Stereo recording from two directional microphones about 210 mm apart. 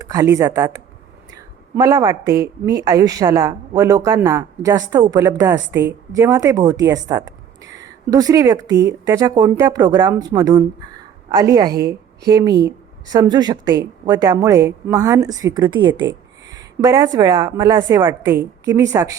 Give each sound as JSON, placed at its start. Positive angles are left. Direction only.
{"t": 0.0, "sound": "a woman's voice", "side_deg": -15}
{"t": 1.7, "sound": "a woman's voice", "side_deg": -15}